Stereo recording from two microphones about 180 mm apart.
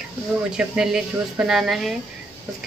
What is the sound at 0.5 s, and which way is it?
Speech, 5° right (ahead or behind).